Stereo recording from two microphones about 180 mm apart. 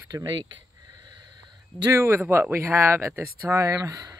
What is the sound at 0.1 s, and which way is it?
Speech, 25° right (ahead or behind).